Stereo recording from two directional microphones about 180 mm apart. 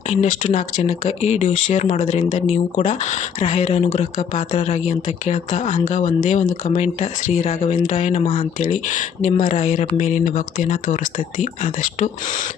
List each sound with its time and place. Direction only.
0.1 s speech: 40° left (ahead or behind)